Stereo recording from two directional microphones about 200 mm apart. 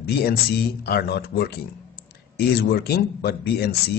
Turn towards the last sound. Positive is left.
turn(degrees=55)  # may be behind; listen again after turning